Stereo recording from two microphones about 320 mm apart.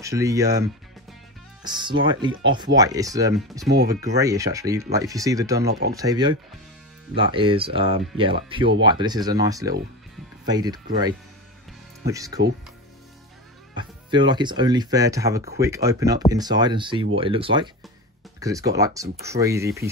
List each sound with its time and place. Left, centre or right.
0.0 s speech: centre
3.6 s speech: right
4.0 s speech: centre
5.7 s speech: right
5.9 s speech: centre
13.7 s speech: centre